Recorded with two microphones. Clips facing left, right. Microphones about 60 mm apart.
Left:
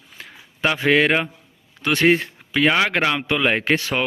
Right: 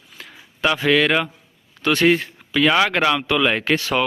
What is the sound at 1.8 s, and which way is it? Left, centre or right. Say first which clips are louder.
A man's voice: right 1 dB; left.